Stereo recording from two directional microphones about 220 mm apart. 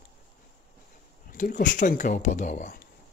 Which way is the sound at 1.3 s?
35° left (ahead or behind).